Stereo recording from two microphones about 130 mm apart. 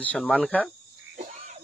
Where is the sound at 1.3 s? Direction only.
70° right (ahead or behind).